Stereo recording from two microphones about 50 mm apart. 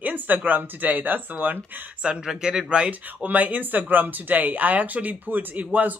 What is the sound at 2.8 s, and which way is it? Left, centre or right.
Speech, right.